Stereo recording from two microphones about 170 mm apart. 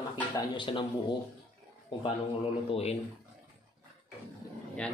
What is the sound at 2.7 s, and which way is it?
Speech, 35° left (ahead or behind).